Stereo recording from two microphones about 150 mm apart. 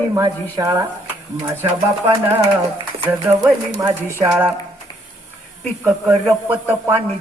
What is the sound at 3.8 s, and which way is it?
Music, 15° right (ahead or behind).